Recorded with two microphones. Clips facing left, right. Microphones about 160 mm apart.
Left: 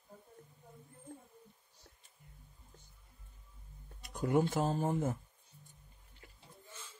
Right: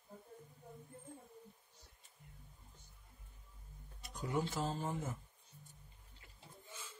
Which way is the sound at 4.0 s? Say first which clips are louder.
Left 8 dB; 55° left (ahead or behind).